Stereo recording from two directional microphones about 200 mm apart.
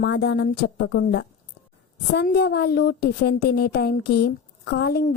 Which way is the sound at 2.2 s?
55° left (ahead or behind).